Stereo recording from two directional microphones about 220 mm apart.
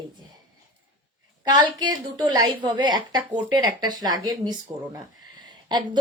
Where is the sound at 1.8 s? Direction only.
20° right (ahead or behind).